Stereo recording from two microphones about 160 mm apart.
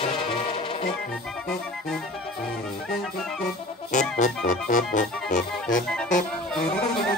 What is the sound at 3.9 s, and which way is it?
Music, 50° left (ahead or behind).